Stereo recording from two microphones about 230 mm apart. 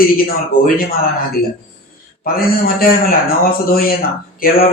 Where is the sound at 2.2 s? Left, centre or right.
Left.